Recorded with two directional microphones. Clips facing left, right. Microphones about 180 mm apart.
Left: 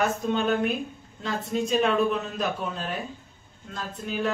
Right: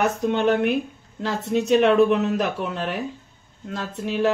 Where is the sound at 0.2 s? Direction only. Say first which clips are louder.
Right 5 dB; 75° right (ahead or behind).